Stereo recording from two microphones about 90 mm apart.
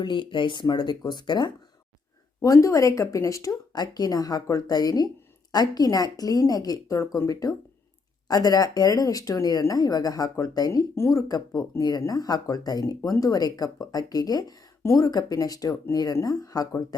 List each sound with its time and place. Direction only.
0.0 s speech: 65° left (ahead or behind)
2.4 s speech: 35° left (ahead or behind)
10.9 s speech: 30° left (ahead or behind)
11.3 s speech: 45° left (ahead or behind)